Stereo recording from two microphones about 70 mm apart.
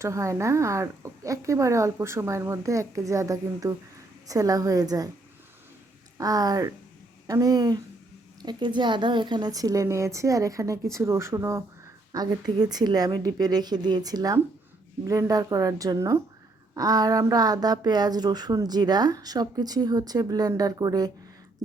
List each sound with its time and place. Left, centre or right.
0.0 s a woman's voice: right
6.1 s a woman's voice: right
8.4 s speech: right
12.1 s speech: right
15.0 s speech: right